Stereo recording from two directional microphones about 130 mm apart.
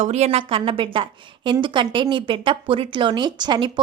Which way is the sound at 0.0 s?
55° right (ahead or behind).